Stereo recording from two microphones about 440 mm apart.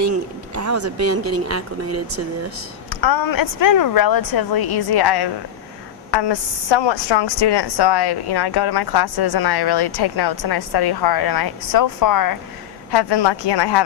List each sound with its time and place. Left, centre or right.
0.5 s speech: right
2.9 s a woman's voice: left
12.9 s a woman's voice: left